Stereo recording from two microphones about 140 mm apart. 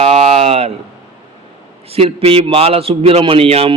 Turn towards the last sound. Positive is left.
turn(degrees=-45)  # may be behind; listen again after turning